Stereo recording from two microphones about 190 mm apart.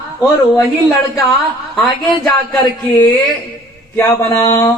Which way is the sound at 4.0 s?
15° left (ahead or behind).